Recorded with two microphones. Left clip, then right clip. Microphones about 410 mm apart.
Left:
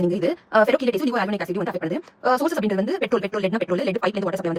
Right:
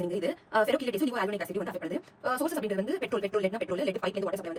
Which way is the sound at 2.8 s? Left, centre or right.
Centre.